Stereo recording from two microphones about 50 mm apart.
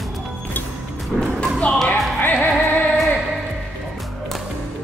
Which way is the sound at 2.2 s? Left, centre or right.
Left.